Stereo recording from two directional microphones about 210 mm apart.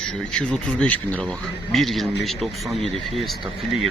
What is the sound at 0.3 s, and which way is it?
Speech, 5° left (ahead or behind).